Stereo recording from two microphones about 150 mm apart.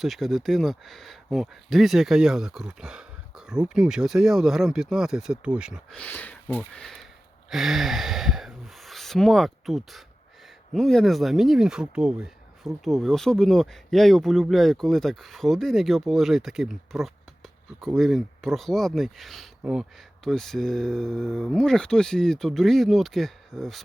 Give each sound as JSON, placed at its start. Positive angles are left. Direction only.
{"t": 0.0, "sound": "speech", "side_deg": 0}
{"t": 6.0, "sound": "speech", "side_deg": 10}